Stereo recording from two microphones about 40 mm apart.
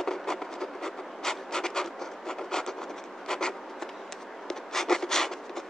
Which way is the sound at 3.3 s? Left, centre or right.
Centre.